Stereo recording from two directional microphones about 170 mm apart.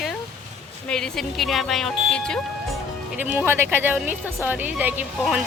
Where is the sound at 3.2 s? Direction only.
15° right (ahead or behind).